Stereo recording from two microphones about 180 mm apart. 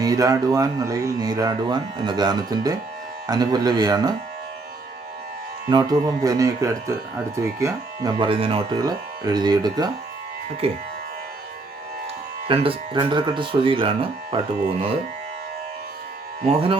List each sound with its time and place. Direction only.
0.0 s speech: 20° right (ahead or behind)
5.6 s speech: 20° right (ahead or behind)
10.6 s speech: 30° right (ahead or behind)
12.5 s speech: 30° right (ahead or behind)
16.5 s speech: 30° right (ahead or behind)